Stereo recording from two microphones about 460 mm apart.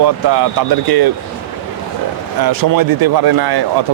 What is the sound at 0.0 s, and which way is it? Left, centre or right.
A man's voice, right.